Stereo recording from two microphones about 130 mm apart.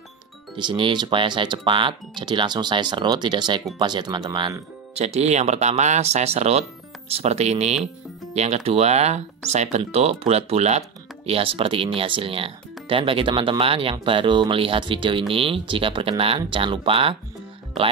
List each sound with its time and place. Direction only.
0.6 s speech: 40° right (ahead or behind)
4.9 s speech: 55° right (ahead or behind)